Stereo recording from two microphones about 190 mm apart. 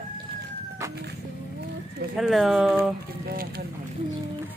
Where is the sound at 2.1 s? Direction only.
Centre (ahead or behind).